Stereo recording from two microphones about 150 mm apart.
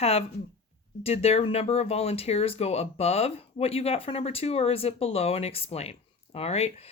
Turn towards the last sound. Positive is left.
turn(degrees=45)  # may be behind; listen again after turning